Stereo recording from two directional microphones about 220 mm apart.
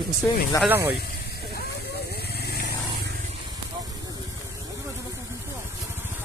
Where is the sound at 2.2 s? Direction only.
45° left (ahead or behind).